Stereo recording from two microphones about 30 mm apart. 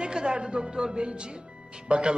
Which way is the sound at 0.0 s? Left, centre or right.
Right.